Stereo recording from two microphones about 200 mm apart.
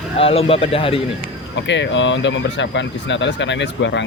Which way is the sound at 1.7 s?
65° left (ahead or behind).